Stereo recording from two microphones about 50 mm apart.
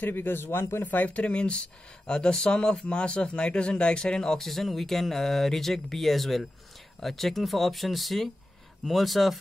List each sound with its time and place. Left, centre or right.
0.0 s a man's voice: left
0.8 s speech: left; by 9.4 s centre